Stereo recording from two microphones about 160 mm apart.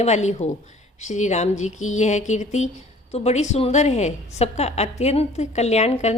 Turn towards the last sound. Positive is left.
turn(degrees=40)  # may be behind; listen again after turning